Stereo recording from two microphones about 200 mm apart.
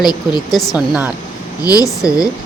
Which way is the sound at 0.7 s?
5° right (ahead or behind).